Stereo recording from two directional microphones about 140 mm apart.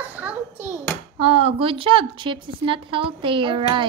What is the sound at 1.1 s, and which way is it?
A woman's voice, 45° right (ahead or behind).